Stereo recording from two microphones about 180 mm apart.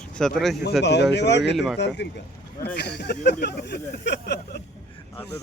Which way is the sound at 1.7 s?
70° left (ahead or behind).